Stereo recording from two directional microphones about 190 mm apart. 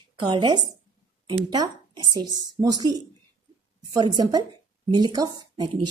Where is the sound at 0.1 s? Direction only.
25° right (ahead or behind).